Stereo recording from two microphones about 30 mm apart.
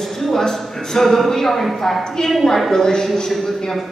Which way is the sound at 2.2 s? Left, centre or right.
Left.